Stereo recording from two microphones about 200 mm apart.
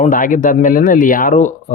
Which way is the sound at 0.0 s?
40° left (ahead or behind).